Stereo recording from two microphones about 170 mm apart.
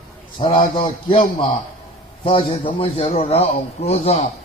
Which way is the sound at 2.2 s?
30° left (ahead or behind).